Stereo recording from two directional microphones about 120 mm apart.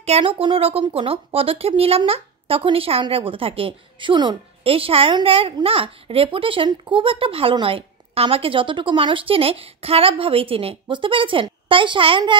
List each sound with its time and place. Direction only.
0.0 s speech: 55° right (ahead or behind)